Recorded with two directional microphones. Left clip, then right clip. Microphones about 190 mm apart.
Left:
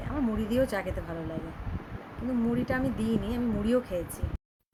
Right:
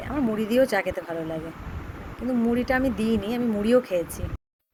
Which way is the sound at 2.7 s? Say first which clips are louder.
Right 6 dB; 15° right (ahead or behind).